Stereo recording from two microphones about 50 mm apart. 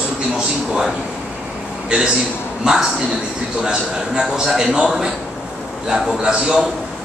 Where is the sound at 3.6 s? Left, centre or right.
Centre.